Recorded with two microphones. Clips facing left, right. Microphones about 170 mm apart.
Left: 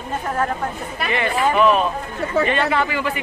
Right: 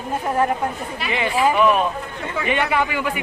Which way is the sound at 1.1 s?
10° right (ahead or behind).